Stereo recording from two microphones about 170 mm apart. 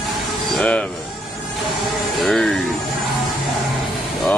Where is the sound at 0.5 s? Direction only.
5° left (ahead or behind).